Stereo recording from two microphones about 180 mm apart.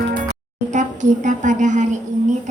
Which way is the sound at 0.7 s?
45° right (ahead or behind).